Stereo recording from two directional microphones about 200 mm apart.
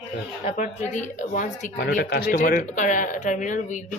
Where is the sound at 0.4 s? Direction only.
35° left (ahead or behind).